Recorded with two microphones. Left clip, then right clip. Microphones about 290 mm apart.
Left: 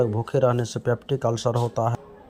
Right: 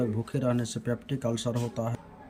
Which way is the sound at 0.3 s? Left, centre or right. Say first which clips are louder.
Left 9 dB; centre.